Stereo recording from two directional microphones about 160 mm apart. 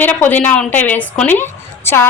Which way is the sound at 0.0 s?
10° left (ahead or behind).